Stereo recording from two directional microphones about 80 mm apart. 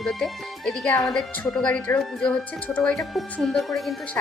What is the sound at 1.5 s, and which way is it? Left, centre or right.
Speech, centre.